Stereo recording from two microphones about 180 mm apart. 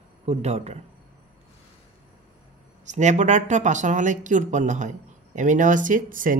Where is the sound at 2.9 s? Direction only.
40° right (ahead or behind).